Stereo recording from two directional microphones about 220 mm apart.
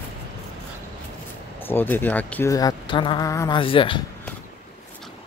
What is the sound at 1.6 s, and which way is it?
Speech, 10° left (ahead or behind).